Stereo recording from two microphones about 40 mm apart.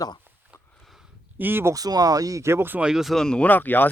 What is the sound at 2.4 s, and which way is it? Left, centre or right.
Speech, right.